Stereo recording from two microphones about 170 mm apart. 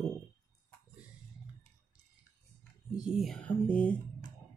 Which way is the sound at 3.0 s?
Centre (ahead or behind).